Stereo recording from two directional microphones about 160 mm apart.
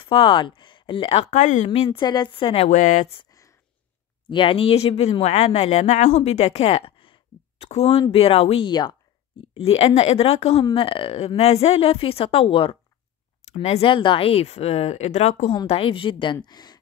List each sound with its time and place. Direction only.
0.0 s speech: 35° left (ahead or behind)
1.3 s speech: 45° left (ahead or behind)
1.9 s speech: 25° left (ahead or behind); by 3.1 s 50° left (ahead or behind)
3.2 s a sound: 20° left (ahead or behind)
4.3 s speech: 30° left (ahead or behind)
9.5 s speech: 40° left (ahead or behind)